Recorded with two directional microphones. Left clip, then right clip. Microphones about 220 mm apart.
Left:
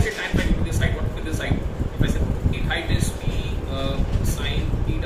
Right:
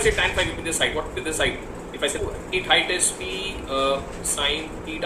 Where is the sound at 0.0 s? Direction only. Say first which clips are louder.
Right 5 dB; 35° right (ahead or behind).